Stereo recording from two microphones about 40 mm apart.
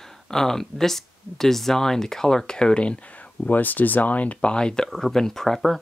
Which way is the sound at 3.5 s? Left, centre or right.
Left.